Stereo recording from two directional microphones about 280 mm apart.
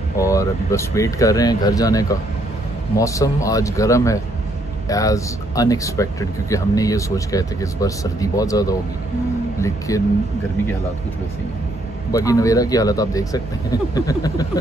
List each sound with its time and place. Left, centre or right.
0.2 s speech: centre
12.1 s speech: centre